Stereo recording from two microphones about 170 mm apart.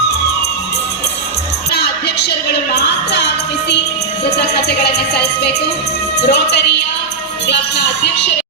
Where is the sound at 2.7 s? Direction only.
85° left.